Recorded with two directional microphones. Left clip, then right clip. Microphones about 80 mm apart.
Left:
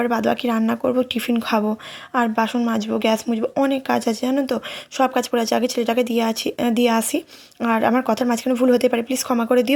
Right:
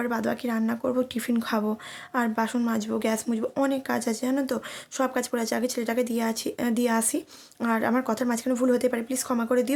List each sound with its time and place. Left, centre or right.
0.0 s speech: left; by 3.5 s centre
3.7 s speech: left